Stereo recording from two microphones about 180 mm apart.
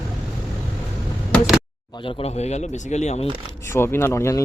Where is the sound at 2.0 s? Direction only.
35° left (ahead or behind).